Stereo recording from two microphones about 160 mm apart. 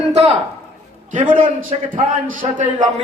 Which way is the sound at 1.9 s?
55° right (ahead or behind).